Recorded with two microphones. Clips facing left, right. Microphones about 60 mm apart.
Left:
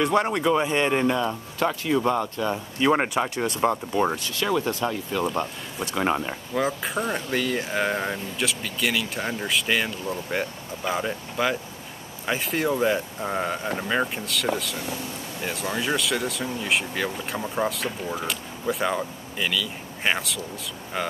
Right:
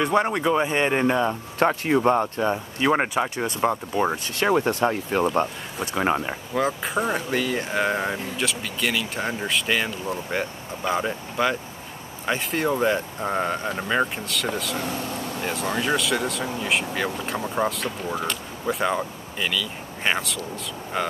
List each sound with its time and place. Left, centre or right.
0.0 s speech: centre
1.6 s speech: right
2.5 s speech: centre
4.3 s speech: right
5.8 s speech: centre